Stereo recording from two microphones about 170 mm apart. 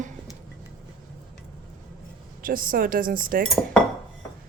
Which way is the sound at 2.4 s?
55° right (ahead or behind).